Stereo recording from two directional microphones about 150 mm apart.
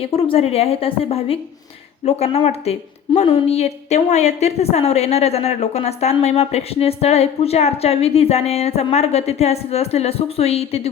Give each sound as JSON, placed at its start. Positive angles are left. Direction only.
{"t": 0.0, "sound": "a woman's voice", "side_deg": 40}